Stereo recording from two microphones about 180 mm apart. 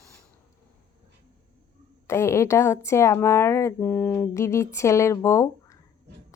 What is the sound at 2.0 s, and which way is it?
Speech, 15° left (ahead or behind).